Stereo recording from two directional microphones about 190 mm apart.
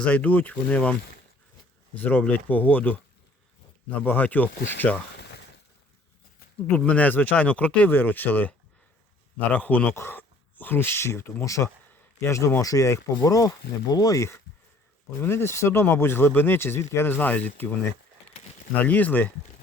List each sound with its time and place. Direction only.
0.0 s speech: 5° left (ahead or behind)
2.0 s speech: 10° left (ahead or behind)
6.7 s speech: 5° left (ahead or behind)
18.9 s speech: 10° left (ahead or behind)